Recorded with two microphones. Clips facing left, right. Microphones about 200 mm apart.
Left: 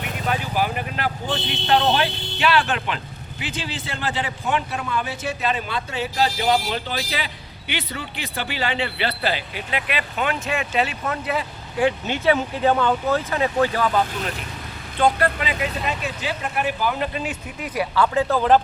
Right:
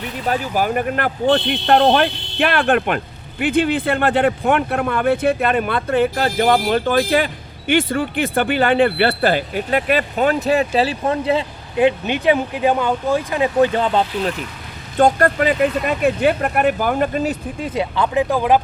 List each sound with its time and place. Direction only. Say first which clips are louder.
0.0 s speech: right 4 dB; 40° right (ahead or behind)
14.9 s speech: right 5 dB; 45° right (ahead or behind)
17.6 s speech: even; 20° right (ahead or behind)